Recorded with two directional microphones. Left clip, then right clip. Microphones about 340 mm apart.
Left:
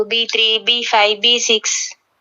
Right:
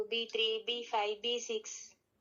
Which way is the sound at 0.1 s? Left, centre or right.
Left.